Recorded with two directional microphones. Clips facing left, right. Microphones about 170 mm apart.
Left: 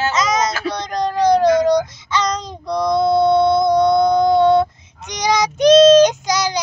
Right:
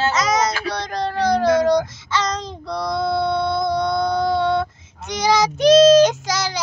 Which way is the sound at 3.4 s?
20° left (ahead or behind).